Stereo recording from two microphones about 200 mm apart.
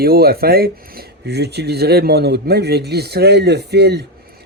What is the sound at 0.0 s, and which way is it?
Speech, 50° right (ahead or behind).